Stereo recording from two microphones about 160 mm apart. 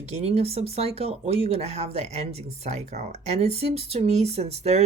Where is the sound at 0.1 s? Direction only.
40° right (ahead or behind).